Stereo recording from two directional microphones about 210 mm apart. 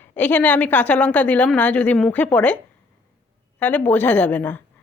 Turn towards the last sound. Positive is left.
turn(degrees=5)  # may be behind; listen again after turning